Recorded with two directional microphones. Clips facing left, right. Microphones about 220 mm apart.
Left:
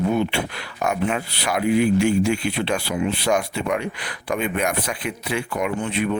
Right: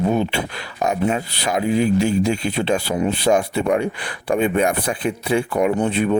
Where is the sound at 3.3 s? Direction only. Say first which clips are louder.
Right 6 dB; 30° right (ahead or behind).